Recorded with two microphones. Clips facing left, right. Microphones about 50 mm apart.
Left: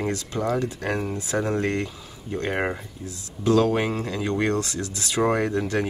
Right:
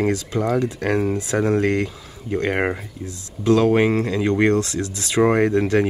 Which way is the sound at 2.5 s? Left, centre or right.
Centre.